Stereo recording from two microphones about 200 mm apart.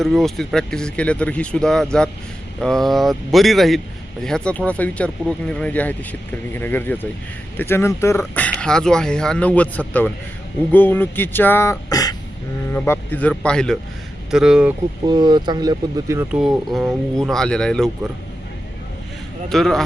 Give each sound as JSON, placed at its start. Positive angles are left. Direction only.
{"t": 0.0, "sound": "speech", "side_deg": 0}
{"t": 15.0, "sound": "speech", "side_deg": -20}
{"t": 16.3, "sound": "speech", "side_deg": 0}
{"t": 19.5, "sound": "speech", "side_deg": 0}